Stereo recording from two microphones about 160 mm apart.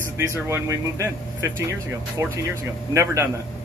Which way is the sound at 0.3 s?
15° right (ahead or behind).